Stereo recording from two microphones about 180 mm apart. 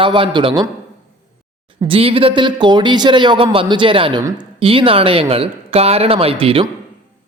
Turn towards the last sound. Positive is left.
turn(degrees=-30)  # may be behind; listen again after turning